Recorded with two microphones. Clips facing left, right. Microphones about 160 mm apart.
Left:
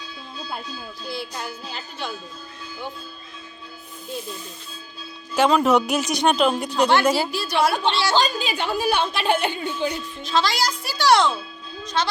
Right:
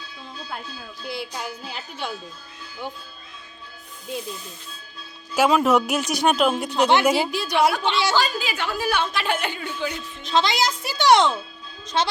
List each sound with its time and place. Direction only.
1.0 s a woman's voice: 15° right (ahead or behind)
5.3 s speech: 5° right (ahead or behind)
6.9 s a woman's voice: 15° right (ahead or behind)
8.1 s a woman's voice: 20° left (ahead or behind)
10.2 s a child's voice: 20° right (ahead or behind)